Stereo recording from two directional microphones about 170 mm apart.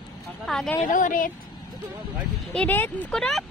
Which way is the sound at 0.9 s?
50° left (ahead or behind).